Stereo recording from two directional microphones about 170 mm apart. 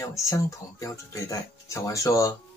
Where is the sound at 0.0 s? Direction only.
20° left (ahead or behind).